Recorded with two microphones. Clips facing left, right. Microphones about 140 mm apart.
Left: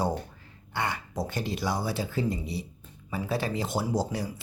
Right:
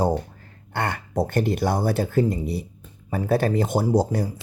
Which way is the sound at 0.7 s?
55° right (ahead or behind).